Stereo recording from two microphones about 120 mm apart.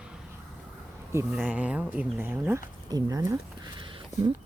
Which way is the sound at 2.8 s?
30° right (ahead or behind).